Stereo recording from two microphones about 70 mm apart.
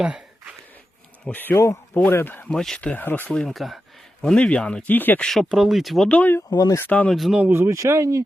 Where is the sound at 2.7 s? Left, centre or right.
Centre.